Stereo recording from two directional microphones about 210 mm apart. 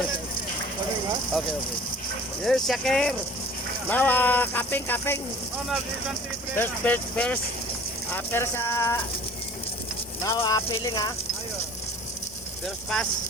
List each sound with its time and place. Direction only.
2.4 s speech: centre (ahead or behind)
6.6 s speech: 10° left (ahead or behind)
10.2 s speech: 20° left (ahead or behind)
12.6 s speech: centre (ahead or behind)